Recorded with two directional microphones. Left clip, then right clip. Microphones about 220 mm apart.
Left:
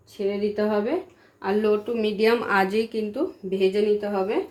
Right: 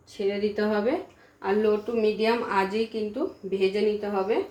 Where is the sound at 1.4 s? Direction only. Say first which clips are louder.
Left 1 dB; 40° left (ahead or behind).